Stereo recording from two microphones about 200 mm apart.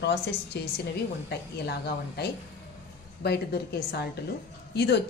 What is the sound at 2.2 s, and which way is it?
A woman's voice, 55° left (ahead or behind).